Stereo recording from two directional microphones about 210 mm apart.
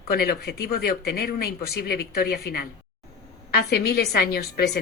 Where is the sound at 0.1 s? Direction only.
50° left (ahead or behind).